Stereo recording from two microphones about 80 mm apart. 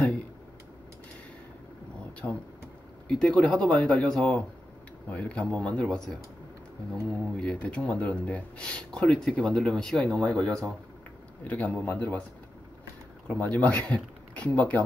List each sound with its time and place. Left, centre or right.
2.2 s speech: centre
3.1 s a man's voice: centre
13.3 s speech: centre